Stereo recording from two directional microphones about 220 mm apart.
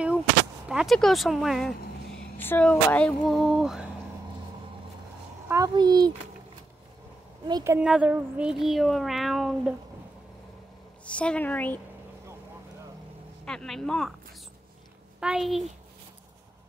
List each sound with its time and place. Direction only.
0.7 s speech: centre (ahead or behind)
5.5 s a child's voice: 15° right (ahead or behind)
7.4 s speech: 15° right (ahead or behind); by 9.8 s centre (ahead or behind)
11.1 s a woman's voice: 5° left (ahead or behind)
13.5 s speech: centre (ahead or behind)
15.1 s a woman's voice: 5° right (ahead or behind)